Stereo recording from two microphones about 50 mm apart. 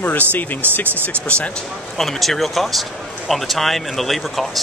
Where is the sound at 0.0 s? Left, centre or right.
Left.